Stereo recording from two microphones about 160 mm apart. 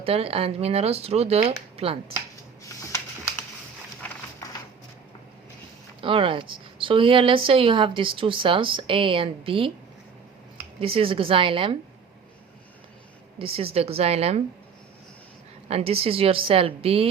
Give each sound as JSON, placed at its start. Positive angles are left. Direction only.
{"t": 0.0, "sound": "a woman's voice", "side_deg": -35}
{"t": 2.6, "sound": "a sound", "side_deg": 20}
{"t": 6.0, "sound": "a woman's voice", "side_deg": -35}
{"t": 10.8, "sound": "a woman's voice", "side_deg": -35}
{"t": 13.4, "sound": "a woman's voice", "side_deg": -35}
{"t": 15.7, "sound": "a woman's voice", "side_deg": -40}